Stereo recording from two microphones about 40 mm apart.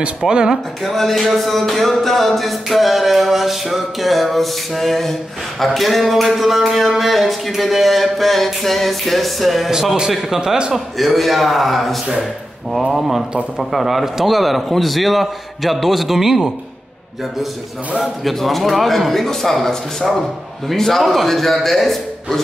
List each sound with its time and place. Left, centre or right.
0.3 s a man's voice: centre
0.8 s music: centre
9.7 s a man's voice: centre
10.7 s music: centre
18.3 s music: centre